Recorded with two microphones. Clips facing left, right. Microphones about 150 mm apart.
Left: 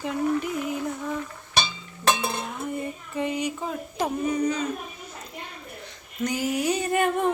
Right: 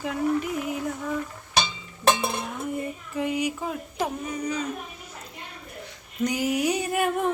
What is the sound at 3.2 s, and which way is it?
Speech, 5° right (ahead or behind).